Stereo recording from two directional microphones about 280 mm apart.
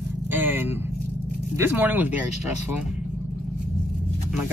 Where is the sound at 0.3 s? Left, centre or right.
Centre.